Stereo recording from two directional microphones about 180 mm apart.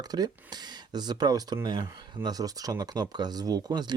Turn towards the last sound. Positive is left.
turn(degrees=-25)  # may be behind; listen again after turning